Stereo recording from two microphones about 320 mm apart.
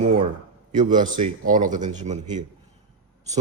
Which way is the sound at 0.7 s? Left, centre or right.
Right.